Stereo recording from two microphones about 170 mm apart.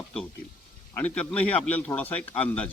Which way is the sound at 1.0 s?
10° left (ahead or behind).